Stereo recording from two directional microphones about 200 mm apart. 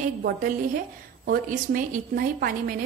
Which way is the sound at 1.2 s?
45° right (ahead or behind).